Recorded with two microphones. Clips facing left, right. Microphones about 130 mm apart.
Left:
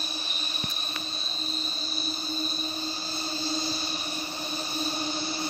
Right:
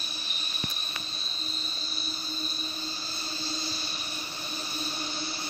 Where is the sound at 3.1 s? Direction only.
30° left (ahead or behind).